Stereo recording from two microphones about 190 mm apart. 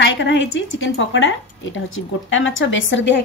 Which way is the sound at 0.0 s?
70° left (ahead or behind).